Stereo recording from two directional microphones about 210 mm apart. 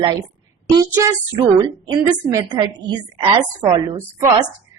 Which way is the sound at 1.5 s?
15° right (ahead or behind).